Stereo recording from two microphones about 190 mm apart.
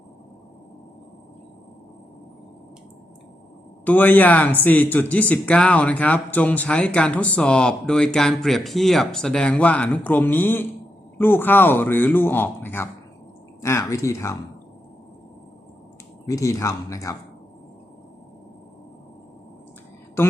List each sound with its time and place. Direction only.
3.8 s speech: 10° left (ahead or behind)
16.2 s speech: 15° left (ahead or behind)